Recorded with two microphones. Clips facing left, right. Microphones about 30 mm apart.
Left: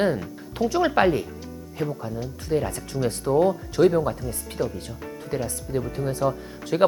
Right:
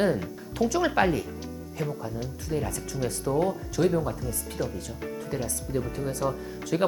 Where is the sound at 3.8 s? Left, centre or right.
Left.